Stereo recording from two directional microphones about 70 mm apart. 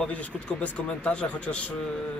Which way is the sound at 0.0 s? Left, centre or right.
Left.